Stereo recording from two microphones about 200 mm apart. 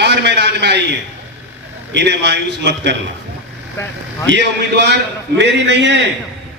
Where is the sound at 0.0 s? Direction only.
60° right (ahead or behind).